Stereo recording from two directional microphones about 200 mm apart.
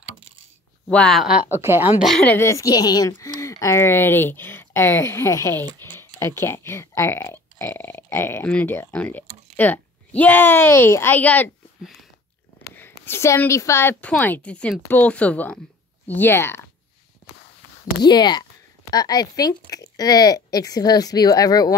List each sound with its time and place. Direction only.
0.8 s a woman's voice: 5° left (ahead or behind)
18.0 s speech: 20° left (ahead or behind)